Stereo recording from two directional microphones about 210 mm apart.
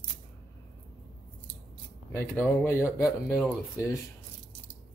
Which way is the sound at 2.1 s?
10° left (ahead or behind).